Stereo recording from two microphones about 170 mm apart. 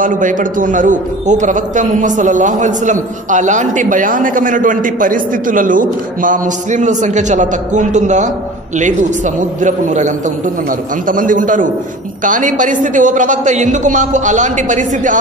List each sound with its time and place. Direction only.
0.0 s a man's voice: 50° right (ahead or behind)